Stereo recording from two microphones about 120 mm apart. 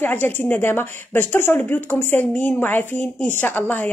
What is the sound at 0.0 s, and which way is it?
Speech, 15° left (ahead or behind).